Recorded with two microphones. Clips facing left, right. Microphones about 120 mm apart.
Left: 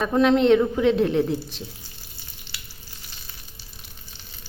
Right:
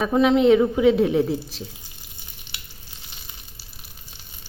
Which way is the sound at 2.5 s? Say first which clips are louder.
Even; 15° right (ahead or behind).